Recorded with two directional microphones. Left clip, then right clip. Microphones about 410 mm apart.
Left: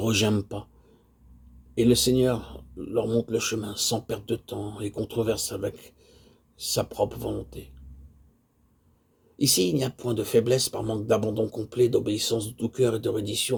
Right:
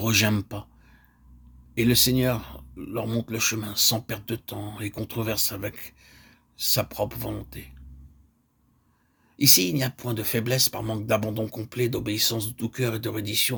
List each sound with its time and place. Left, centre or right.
0.0 s speech: right
1.7 s speech: right
9.3 s speech: right